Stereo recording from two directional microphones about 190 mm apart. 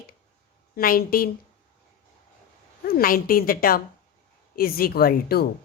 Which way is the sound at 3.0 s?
50° left (ahead or behind).